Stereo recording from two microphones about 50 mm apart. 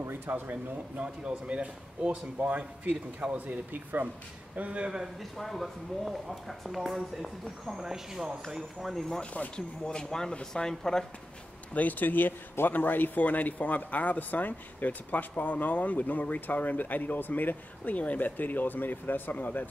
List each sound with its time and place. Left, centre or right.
0.3 s speech: right
1.0 s speech: right
4.6 s speech: right
5.4 s speech: centre
9.2 s speech: left
9.8 s speech: centre
11.7 s speech: left